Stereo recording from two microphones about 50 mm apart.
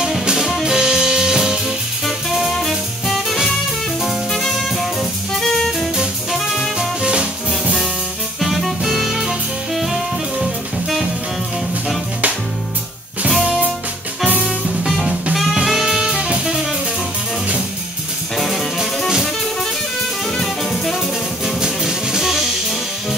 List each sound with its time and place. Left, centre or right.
0.0 s music: centre
2.0 s music: centre
6.8 s music: centre
8.4 s music: centre
10.4 s music: centre
14.4 s music: centre
18.3 s music: centre
20.2 s jazz: centre
21.5 s music: centre